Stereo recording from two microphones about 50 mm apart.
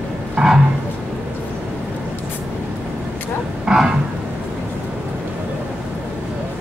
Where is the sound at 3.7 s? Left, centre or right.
Centre.